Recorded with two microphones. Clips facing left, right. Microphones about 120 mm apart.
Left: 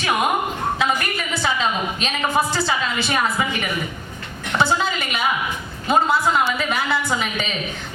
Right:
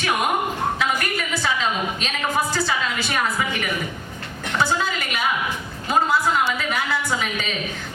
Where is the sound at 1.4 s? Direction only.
25° left (ahead or behind).